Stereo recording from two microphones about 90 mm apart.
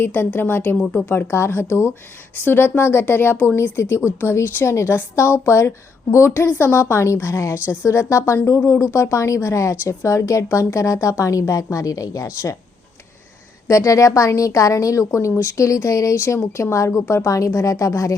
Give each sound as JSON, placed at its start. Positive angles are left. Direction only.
{"t": 0.0, "sound": "a woman's voice", "side_deg": 25}
{"t": 0.8, "sound": "speech", "side_deg": 10}
{"t": 1.0, "sound": "a woman's voice", "side_deg": 25}
{"t": 13.7, "sound": "a woman's voice", "side_deg": 35}